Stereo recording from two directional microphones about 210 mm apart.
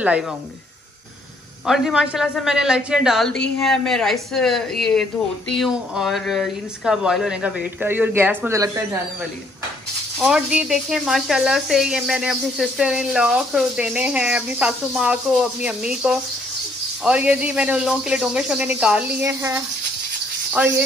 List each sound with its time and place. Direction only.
1.7 s speech: centre (ahead or behind)
10.1 s speech: 5° right (ahead or behind)